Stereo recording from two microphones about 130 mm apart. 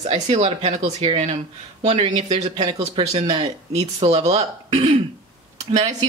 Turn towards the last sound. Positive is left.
turn(degrees=-55)  # may be behind; listen again after turning